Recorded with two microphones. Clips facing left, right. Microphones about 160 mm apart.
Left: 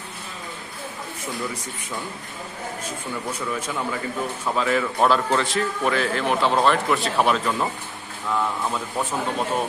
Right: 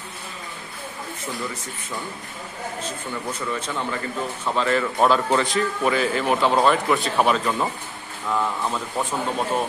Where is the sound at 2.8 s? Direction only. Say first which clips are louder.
Even; 10° left (ahead or behind).